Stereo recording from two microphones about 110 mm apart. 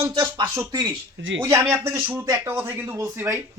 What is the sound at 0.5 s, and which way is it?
Speech, 35° right (ahead or behind).